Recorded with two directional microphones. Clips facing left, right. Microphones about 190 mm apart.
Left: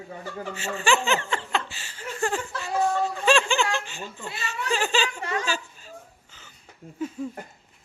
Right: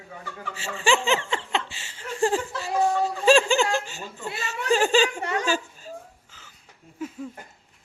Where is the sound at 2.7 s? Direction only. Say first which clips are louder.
Right 1 dB; 15° right (ahead or behind).